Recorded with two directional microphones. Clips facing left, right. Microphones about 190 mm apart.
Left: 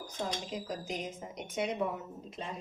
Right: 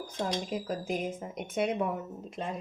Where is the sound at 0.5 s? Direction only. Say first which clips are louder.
Right 5 dB; 55° right (ahead or behind).